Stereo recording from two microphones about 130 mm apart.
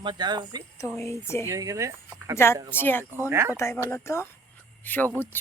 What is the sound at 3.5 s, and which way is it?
Speech, 20° left (ahead or behind).